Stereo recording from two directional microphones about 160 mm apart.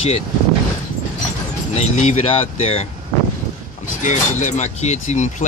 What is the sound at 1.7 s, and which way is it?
Speech, 50° left (ahead or behind).